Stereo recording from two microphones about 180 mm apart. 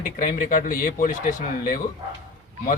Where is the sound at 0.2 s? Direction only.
45° left (ahead or behind).